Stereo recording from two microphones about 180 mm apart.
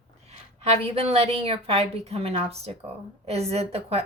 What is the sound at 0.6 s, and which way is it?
A woman's voice, 35° right (ahead or behind).